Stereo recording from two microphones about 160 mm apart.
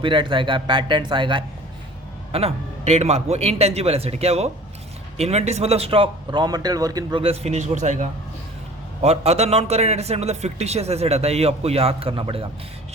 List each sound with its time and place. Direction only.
0.0 s a man's voice: 30° right (ahead or behind)
7.2 s a man's voice: 40° right (ahead or behind)